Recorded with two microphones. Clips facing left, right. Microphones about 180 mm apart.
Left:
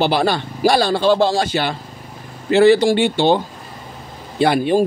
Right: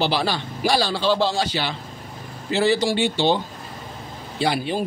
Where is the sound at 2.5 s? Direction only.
60° left (ahead or behind).